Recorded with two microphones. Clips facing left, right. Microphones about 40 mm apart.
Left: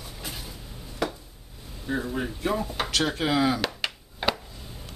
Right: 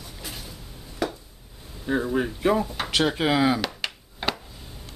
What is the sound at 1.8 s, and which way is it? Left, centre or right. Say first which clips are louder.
Speech: right 5 dB; centre.